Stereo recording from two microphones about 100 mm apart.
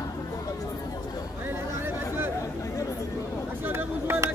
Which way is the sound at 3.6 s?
20° right (ahead or behind).